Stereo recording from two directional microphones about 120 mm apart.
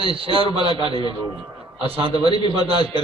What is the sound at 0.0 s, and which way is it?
A man's voice, 50° right (ahead or behind).